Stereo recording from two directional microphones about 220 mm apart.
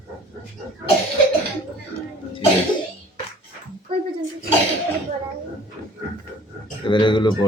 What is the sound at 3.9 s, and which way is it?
Dog, 25° right (ahead or behind).